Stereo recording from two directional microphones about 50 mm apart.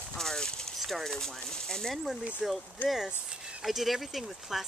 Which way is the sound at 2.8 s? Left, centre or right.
Left.